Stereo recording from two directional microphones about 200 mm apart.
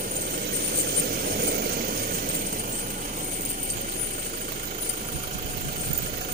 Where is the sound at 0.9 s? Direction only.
50° right (ahead or behind).